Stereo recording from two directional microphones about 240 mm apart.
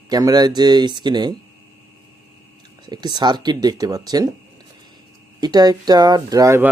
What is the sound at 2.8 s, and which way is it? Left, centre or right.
Speech, centre.